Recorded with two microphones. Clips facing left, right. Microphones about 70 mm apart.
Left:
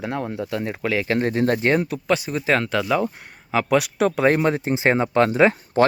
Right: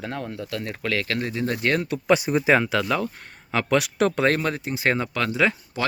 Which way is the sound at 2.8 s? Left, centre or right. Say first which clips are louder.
Left 3 dB; centre.